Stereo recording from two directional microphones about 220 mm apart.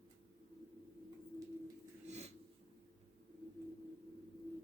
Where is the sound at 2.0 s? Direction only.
30° right (ahead or behind).